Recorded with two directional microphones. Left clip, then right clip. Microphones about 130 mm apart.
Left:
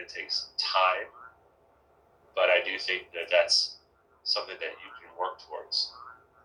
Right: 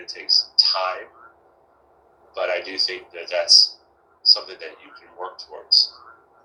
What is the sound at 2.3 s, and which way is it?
A man's voice, 30° left (ahead or behind).